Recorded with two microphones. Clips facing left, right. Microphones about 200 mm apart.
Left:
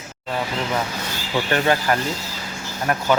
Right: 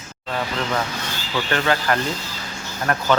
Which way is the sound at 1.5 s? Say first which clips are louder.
Left 1 dB; 15° left (ahead or behind).